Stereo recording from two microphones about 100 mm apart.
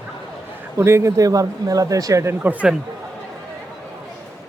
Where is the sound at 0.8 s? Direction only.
30° right (ahead or behind).